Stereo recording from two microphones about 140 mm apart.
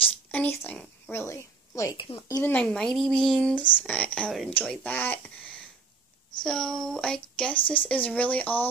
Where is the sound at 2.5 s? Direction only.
5° left (ahead or behind).